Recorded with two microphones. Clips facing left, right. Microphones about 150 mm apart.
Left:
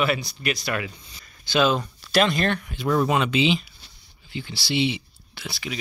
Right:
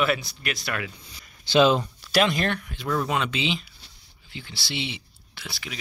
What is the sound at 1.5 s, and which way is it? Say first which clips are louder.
Speech: right 2 dB; 25° right (ahead or behind).